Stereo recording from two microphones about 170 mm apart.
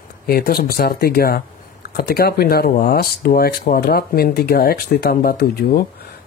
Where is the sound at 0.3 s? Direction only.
65° left (ahead or behind).